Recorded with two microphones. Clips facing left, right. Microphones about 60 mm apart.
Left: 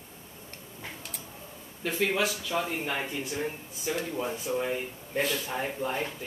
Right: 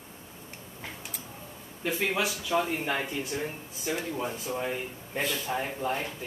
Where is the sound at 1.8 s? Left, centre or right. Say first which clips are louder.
Left 1 dB; centre.